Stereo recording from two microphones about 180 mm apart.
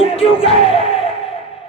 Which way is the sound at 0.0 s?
30° left (ahead or behind).